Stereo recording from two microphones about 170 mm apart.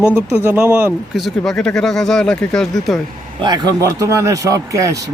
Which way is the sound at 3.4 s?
25° right (ahead or behind).